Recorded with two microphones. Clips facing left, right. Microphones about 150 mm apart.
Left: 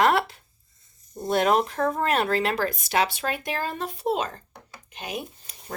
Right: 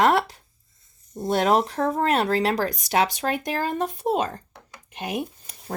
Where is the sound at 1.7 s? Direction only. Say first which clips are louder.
Right 2 dB; 25° right (ahead or behind).